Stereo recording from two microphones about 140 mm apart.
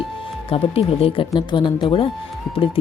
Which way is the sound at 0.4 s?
45° left (ahead or behind).